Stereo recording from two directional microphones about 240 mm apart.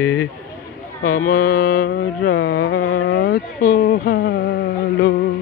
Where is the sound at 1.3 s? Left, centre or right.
Left.